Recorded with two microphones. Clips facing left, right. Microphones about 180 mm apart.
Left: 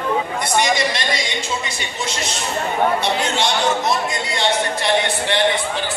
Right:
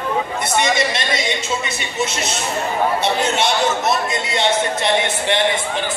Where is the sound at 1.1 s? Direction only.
20° right (ahead or behind).